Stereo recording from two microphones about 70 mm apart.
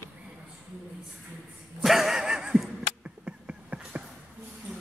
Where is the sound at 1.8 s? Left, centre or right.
Centre.